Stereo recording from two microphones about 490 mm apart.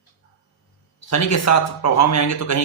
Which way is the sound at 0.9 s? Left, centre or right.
Left.